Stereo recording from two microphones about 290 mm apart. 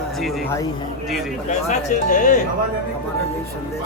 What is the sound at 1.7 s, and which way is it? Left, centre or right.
Speech, left.